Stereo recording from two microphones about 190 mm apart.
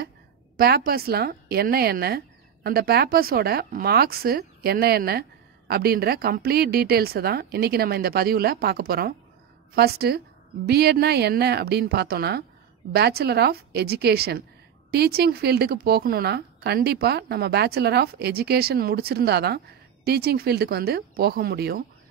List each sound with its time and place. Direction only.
0.6 s a woman's voice: 55° right (ahead or behind)